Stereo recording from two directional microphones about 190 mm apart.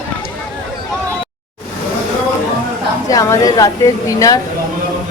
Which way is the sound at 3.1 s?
15° left (ahead or behind).